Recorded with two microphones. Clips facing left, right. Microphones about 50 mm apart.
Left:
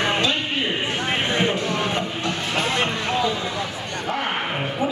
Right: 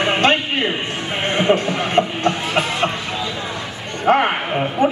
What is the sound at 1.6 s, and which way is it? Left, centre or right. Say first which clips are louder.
Music: right 2 dB; centre.